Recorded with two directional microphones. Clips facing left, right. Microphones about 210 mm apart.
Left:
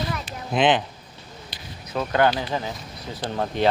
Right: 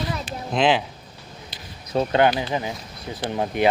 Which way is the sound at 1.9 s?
30° right (ahead or behind).